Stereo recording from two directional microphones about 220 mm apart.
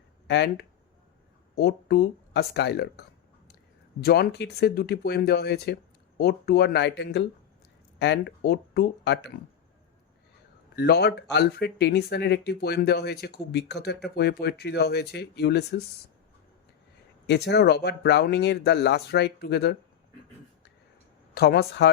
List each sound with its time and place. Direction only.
0.3 s speech: 50° left (ahead or behind)
4.0 s speech: 45° left (ahead or behind)
10.8 s speech: 50° left (ahead or behind)
17.2 s speech: 50° left (ahead or behind)
21.3 s speech: 45° left (ahead or behind)